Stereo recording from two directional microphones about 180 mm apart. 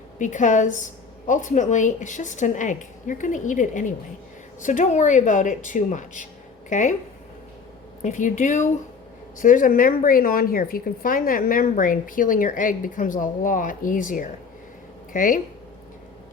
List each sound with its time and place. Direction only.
0.2 s a woman's voice: 45° left (ahead or behind)
8.0 s a woman's voice: 45° left (ahead or behind)